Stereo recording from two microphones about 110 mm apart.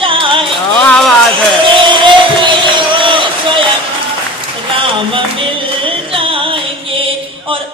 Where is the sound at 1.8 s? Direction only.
45° right (ahead or behind).